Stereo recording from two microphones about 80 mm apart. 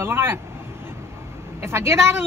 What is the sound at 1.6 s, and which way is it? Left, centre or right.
Speech, right.